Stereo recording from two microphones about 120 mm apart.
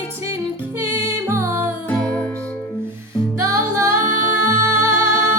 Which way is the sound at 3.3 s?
25° right (ahead or behind).